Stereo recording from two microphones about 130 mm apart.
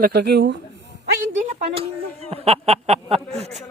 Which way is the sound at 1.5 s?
55° right (ahead or behind).